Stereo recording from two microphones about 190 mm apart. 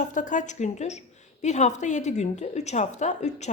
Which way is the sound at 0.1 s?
40° left (ahead or behind).